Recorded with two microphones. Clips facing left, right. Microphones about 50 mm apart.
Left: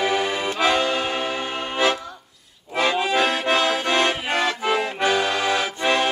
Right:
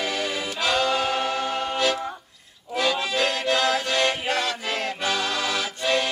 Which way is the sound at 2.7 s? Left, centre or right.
Left.